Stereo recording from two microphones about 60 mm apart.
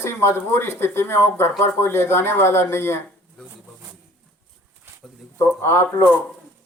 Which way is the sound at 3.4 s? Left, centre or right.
Right.